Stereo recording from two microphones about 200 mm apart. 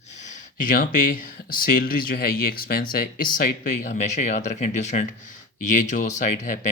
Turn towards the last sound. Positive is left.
turn(degrees=40)  # may be behind; listen again after turning